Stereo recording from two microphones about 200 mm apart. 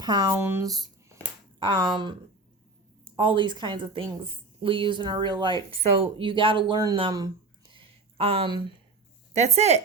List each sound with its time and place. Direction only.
0.0 s a woman's voice: 20° right (ahead or behind)
7.7 s a sound: 25° right (ahead or behind)
9.3 s speech: 35° right (ahead or behind)